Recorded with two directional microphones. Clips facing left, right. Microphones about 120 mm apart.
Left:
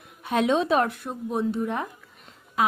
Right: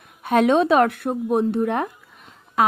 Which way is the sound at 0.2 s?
55° right (ahead or behind).